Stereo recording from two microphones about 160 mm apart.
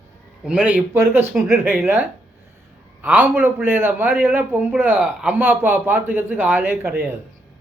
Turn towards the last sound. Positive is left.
turn(degrees=-10)  # may be behind; listen again after turning